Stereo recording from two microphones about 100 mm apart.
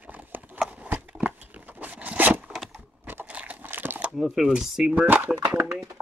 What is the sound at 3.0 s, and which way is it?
Crumpling, 20° right (ahead or behind).